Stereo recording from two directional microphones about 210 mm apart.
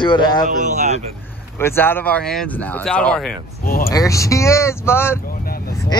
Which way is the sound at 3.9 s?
15° left (ahead or behind).